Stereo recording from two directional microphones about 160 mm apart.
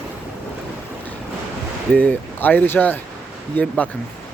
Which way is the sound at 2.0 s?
10° left (ahead or behind).